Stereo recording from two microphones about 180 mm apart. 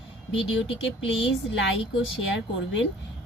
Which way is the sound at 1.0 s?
90° left.